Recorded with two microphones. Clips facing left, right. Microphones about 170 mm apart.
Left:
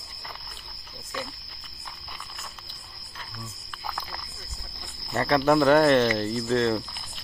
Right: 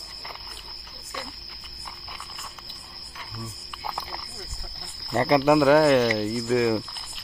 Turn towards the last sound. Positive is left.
turn(degrees=-5)  # may be behind; listen again after turning